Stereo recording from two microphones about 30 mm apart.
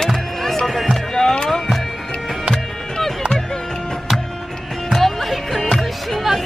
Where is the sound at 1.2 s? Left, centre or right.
Left.